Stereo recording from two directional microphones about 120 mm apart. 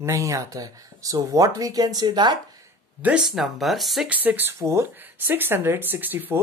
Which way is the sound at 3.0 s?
10° right (ahead or behind).